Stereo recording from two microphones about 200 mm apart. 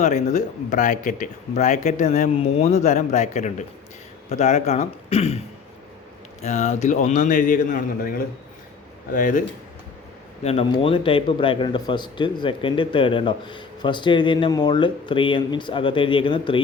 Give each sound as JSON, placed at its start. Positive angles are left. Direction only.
{"t": 0.0, "sound": "speech", "side_deg": 35}
{"t": 6.4, "sound": "speech", "side_deg": 35}
{"t": 10.4, "sound": "speech", "side_deg": 30}